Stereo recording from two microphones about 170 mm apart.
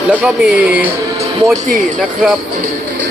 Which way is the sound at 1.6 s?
50° right (ahead or behind).